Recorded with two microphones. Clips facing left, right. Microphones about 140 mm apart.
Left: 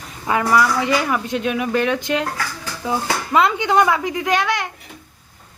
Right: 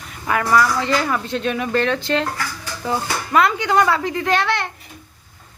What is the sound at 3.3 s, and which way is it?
A woman's voice, 20° left (ahead or behind).